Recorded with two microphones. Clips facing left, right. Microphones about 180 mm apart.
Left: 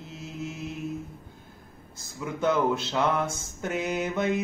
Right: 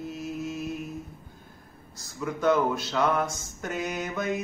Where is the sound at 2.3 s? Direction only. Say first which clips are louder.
Right 1 dB; 25° left (ahead or behind).